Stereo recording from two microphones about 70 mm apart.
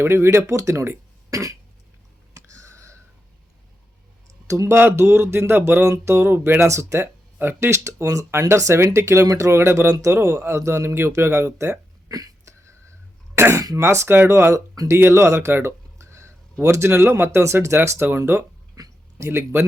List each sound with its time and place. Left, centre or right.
0.0 s speech: right
2.3 s a sound: right
4.4 s speech: right
4.8 s speech: right
7.0 s speech: right
9.5 s speech: right
12.5 s whispering: right
13.3 s speech: right
18.8 s a sound: right
19.2 s speech: right